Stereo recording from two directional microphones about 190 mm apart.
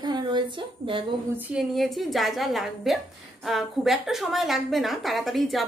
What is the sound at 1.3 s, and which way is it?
Speech, 10° right (ahead or behind).